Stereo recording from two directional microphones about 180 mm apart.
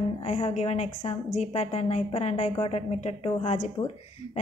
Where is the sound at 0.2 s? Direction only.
35° left (ahead or behind).